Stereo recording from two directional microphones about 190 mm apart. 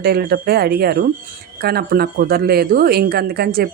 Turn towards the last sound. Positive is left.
turn(degrees=-55)  # may be behind; listen again after turning